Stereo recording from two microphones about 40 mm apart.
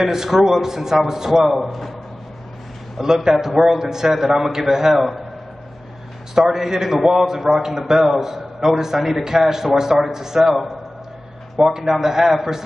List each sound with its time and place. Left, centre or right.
0.0 s a man's voice: centre
1.6 s a man's voice: centre
3.3 s a man's voice: centre
6.5 s a man's voice: centre